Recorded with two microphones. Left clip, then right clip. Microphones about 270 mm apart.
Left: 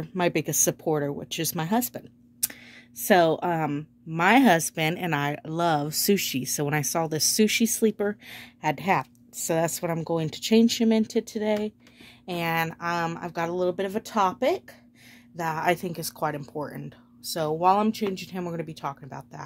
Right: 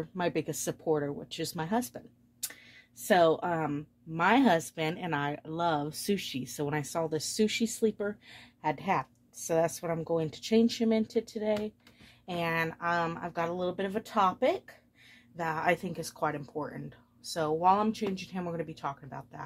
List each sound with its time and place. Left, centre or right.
0.0 s speech: left